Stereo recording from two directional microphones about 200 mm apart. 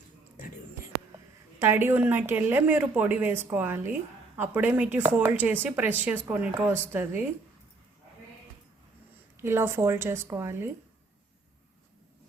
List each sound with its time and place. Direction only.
1.5 s speech: 10° right (ahead or behind)
9.4 s speech: 10° right (ahead or behind)